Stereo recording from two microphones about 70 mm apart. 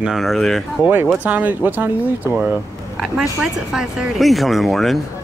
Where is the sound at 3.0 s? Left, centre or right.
Centre.